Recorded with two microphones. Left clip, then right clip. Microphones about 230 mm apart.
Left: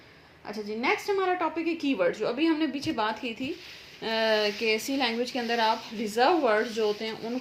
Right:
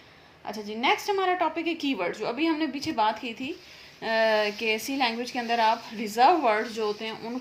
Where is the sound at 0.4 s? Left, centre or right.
Right.